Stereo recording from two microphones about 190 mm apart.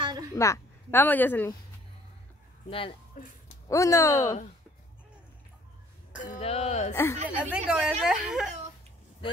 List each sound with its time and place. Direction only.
0.0 s a sound: 25° right (ahead or behind)
0.3 s speech: 15° left (ahead or behind)
2.7 s speech: 25° left (ahead or behind)
3.6 s speech: 15° left (ahead or behind)
6.2 s a sound: 35° left (ahead or behind)
6.9 s speech: 15° left (ahead or behind)
7.2 s speech: 5° right (ahead or behind)